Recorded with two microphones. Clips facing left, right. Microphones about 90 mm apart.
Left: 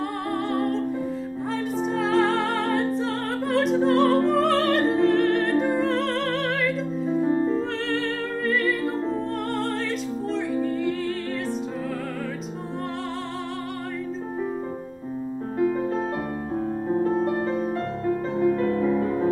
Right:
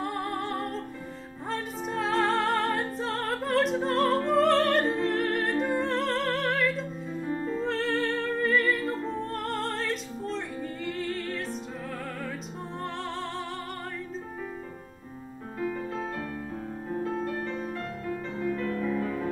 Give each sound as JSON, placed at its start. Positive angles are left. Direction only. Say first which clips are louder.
{"t": 0.0, "sound": "music", "louder": "left 4 dB", "side_deg": 0}
{"t": 7.1, "sound": "music", "louder": "left 11 dB", "side_deg": 40}
{"t": 7.6, "sound": "music", "louder": "left 1 dB", "side_deg": 0}
{"t": 15.6, "sound": "music", "louder": "left 8 dB", "side_deg": 40}
{"t": 17.6, "sound": "music", "louder": "left 8 dB", "side_deg": 40}